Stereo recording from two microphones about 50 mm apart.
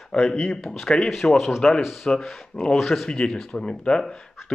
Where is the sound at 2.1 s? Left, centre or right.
Centre.